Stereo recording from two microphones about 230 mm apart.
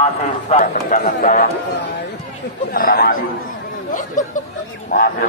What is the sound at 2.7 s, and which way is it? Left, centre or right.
Speech, left.